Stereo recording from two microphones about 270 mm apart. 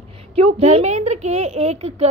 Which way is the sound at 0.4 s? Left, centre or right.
Right.